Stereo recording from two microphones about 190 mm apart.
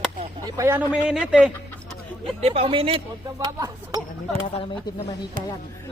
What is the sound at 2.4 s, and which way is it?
Speech, 30° right (ahead or behind).